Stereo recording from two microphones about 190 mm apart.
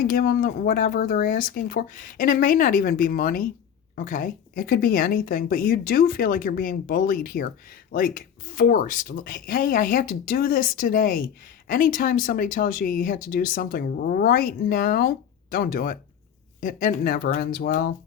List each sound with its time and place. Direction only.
0.0 s speech: 50° left (ahead or behind)